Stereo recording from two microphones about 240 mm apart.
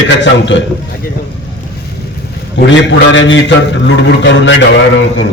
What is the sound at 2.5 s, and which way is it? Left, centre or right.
A man's voice, left.